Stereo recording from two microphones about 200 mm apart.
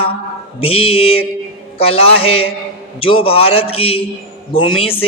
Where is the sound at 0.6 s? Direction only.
30° left (ahead or behind).